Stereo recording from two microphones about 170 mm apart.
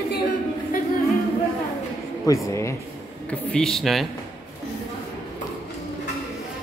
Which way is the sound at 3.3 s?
5° left (ahead or behind).